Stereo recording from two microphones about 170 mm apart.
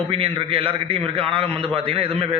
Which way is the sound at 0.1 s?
30° right (ahead or behind).